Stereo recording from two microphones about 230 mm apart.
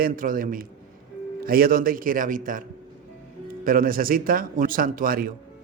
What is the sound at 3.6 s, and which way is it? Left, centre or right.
A man's voice, right.